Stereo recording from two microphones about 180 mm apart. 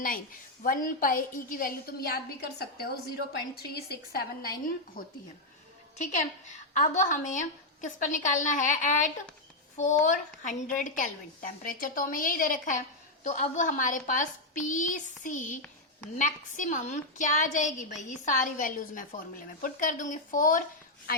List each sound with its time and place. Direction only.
0.6 s a woman's voice: 50° left (ahead or behind)
6.0 s a woman's voice: 40° left (ahead or behind)